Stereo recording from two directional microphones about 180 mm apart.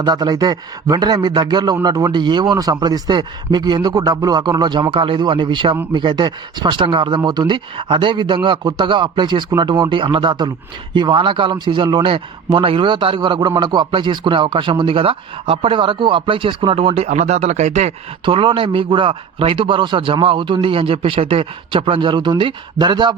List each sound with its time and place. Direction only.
0.0 s a man's voice: 20° right (ahead or behind)